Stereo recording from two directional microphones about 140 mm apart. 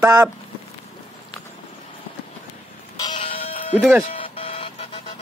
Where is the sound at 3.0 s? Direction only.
35° left (ahead or behind).